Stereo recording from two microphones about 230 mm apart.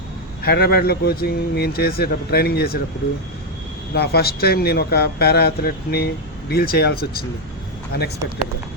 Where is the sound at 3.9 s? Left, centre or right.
Left.